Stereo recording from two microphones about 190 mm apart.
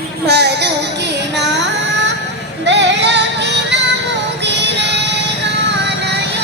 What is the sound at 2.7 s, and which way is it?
Music, 65° right (ahead or behind).